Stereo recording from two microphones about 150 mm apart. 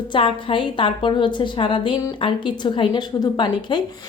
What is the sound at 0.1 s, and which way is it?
Speech, 35° left (ahead or behind).